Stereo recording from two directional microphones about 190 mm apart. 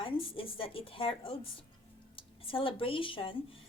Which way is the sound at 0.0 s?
30° left (ahead or behind).